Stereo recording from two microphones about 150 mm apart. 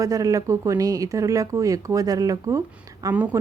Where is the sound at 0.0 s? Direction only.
25° right (ahead or behind).